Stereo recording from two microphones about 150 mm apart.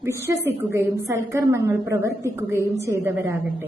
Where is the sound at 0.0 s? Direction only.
20° right (ahead or behind).